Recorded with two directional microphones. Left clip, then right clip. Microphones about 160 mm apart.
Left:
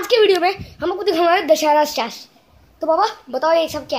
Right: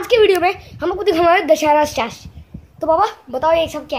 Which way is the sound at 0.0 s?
Centre (ahead or behind).